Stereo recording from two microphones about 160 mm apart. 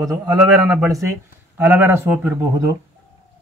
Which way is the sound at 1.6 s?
10° right (ahead or behind).